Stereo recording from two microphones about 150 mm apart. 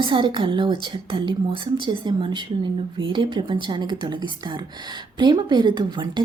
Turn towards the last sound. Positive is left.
turn(degrees=-30)  # may be behind; listen again after turning